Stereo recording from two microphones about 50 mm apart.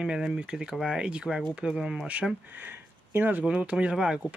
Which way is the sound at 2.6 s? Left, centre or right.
Right.